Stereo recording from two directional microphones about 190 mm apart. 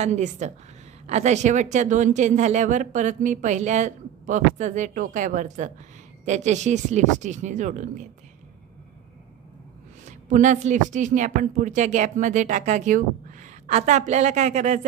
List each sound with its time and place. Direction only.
0.0 s speech: 40° right (ahead or behind)
10.0 s speech: 40° right (ahead or behind)